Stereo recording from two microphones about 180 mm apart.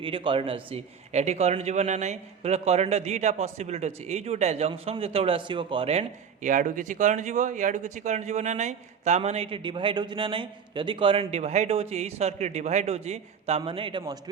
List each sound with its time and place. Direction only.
0.0 s a man's voice: 30° right (ahead or behind)